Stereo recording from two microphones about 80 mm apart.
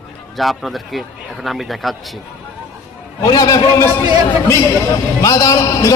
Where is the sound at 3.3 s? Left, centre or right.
Left.